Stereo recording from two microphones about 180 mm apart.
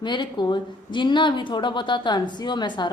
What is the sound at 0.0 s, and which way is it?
A woman's voice, 25° left (ahead or behind).